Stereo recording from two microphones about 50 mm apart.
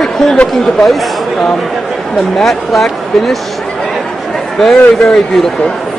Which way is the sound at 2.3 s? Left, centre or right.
Centre.